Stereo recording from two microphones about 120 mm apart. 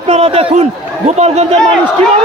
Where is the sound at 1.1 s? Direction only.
65° right (ahead or behind).